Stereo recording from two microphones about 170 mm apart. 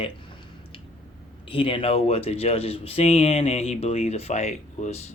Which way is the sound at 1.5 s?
30° left (ahead or behind).